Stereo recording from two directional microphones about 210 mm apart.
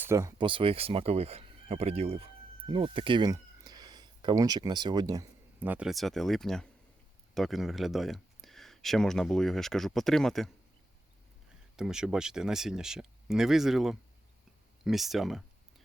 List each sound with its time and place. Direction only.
0.1 s speech: 15° right (ahead or behind); by 10.5 s centre (ahead or behind)
11.8 s speech: 5° right (ahead or behind)